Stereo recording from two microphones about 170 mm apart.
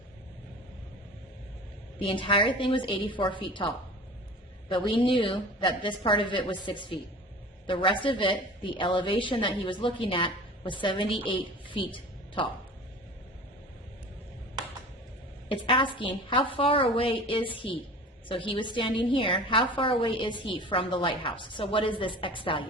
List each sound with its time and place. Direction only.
2.0 s a woman's voice: 30° left (ahead or behind)
4.7 s a woman's voice: 30° left (ahead or behind)
15.4 s a woman's voice: 30° left (ahead or behind)